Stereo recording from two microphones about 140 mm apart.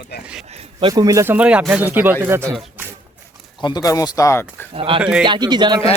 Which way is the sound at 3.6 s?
30° left (ahead or behind).